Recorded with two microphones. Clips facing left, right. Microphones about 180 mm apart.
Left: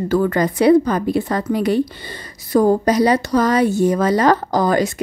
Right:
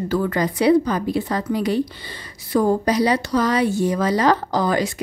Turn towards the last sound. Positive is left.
turn(degrees=45)  # may be behind; listen again after turning